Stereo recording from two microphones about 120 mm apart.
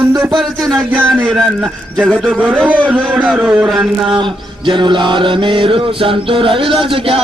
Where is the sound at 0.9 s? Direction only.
15° right (ahead or behind).